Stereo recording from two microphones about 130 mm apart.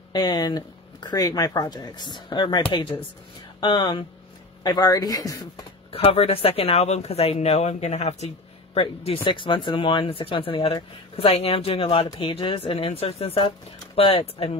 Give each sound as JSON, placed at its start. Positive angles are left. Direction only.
{"t": 0.1, "sound": "speech", "side_deg": 30}
{"t": 4.6, "sound": "speech", "side_deg": 30}
{"t": 5.9, "sound": "speech", "side_deg": 45}